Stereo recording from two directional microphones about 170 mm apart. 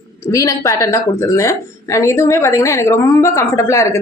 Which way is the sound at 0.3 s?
20° left (ahead or behind).